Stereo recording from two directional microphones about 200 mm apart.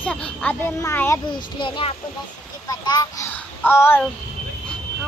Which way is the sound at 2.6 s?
20° left (ahead or behind).